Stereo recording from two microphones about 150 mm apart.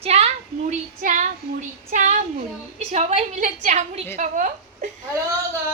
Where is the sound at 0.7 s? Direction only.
55° right (ahead or behind).